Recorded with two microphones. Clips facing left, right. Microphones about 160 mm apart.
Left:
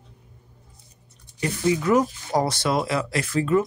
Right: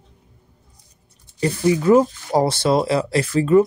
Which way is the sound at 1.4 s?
30° right (ahead or behind).